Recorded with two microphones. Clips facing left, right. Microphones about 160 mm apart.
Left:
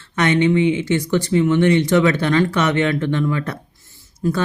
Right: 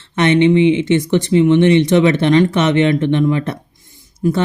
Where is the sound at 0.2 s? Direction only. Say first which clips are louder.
Right 4 dB; 25° right (ahead or behind).